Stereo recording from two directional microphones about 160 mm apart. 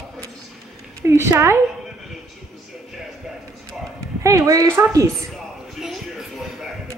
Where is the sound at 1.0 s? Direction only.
15° right (ahead or behind).